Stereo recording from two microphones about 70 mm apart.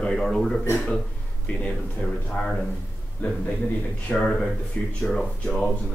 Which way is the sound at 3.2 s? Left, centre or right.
Left.